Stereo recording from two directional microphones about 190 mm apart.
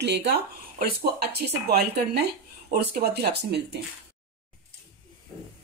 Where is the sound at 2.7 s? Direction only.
55° right (ahead or behind).